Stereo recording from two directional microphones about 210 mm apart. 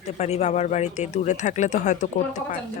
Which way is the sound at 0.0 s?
30° left (ahead or behind).